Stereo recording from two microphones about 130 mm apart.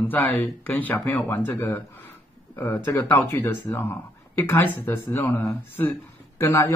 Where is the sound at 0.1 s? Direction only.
15° left (ahead or behind).